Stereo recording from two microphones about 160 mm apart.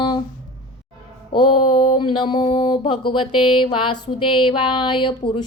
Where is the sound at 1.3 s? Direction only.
30° left (ahead or behind).